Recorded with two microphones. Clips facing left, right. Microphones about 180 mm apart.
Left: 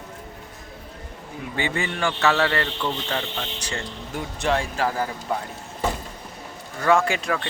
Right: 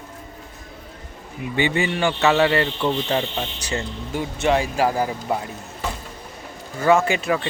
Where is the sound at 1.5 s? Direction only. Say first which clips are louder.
Right 6 dB; 25° right (ahead or behind).